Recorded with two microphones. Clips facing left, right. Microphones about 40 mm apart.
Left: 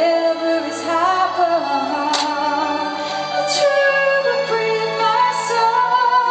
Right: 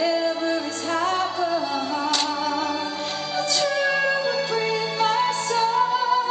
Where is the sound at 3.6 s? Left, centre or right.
Centre.